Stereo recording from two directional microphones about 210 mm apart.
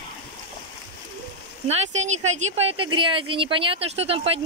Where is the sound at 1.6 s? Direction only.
30° right (ahead or behind).